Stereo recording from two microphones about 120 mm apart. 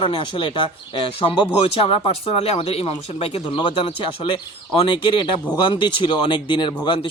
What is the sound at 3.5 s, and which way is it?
Speech, 45° left (ahead or behind).